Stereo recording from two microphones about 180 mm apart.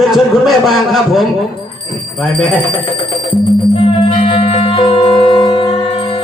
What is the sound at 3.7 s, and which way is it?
Music, 30° left (ahead or behind).